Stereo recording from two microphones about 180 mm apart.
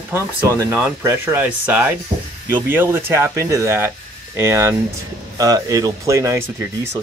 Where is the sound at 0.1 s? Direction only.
15° right (ahead or behind).